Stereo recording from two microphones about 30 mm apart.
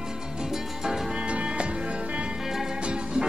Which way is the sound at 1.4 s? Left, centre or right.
Right.